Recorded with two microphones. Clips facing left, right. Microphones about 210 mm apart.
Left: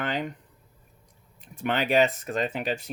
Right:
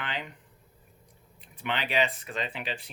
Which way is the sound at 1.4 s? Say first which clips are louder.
Left 6 dB; 45° left (ahead or behind).